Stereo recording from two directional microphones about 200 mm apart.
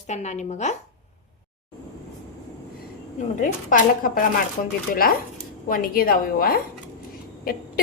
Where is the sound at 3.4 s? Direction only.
40° left (ahead or behind).